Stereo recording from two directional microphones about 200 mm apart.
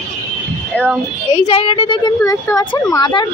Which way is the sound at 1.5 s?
25° left (ahead or behind).